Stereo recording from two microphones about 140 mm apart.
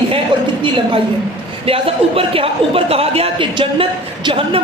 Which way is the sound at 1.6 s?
40° right (ahead or behind).